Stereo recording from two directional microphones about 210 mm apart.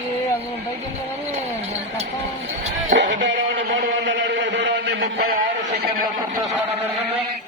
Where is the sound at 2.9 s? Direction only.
60° right (ahead or behind).